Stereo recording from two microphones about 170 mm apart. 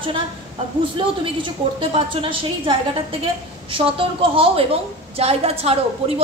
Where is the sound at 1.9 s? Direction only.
30° right (ahead or behind).